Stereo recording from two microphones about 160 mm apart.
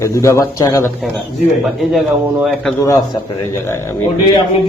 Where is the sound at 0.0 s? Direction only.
20° left (ahead or behind).